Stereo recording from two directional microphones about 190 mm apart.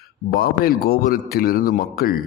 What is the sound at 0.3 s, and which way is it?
A man's voice, 50° left (ahead or behind).